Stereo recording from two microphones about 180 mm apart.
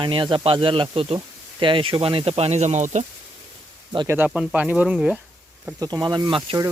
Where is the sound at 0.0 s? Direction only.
25° right (ahead or behind).